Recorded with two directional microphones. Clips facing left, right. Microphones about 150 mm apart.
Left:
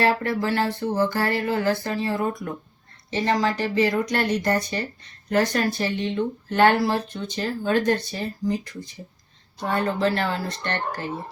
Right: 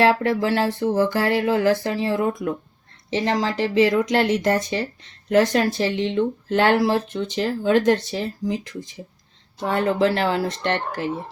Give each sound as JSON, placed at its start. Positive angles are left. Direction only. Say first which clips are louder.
{"t": 0.0, "sound": "speech", "louder": "right 4 dB", "side_deg": -90}